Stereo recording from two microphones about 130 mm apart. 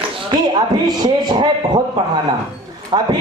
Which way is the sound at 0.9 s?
35° right (ahead or behind).